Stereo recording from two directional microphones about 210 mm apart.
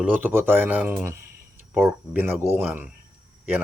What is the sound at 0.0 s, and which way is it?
Speech, 10° right (ahead or behind).